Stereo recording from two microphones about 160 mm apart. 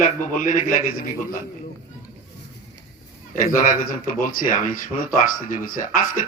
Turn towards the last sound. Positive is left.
turn(degrees=55)  # may be behind; listen again after turning